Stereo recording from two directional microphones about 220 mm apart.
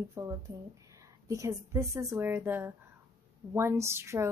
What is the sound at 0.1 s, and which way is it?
A woman's voice, 15° right (ahead or behind).